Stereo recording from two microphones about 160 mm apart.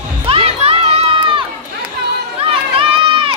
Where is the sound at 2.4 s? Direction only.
35° right (ahead or behind).